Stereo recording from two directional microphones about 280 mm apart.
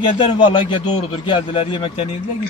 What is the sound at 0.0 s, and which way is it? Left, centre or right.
A man's voice, centre.